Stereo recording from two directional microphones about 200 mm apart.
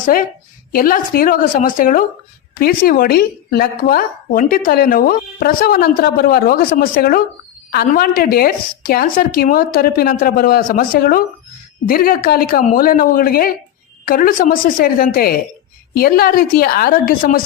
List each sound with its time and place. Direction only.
0.0 s a woman's voice: 45° left (ahead or behind)